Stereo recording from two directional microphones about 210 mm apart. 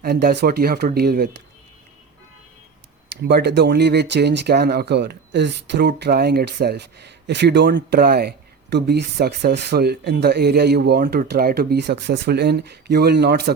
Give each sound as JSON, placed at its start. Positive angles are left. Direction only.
{"t": 0.0, "sound": "speech", "side_deg": -50}
{"t": 3.2, "sound": "speech", "side_deg": -50}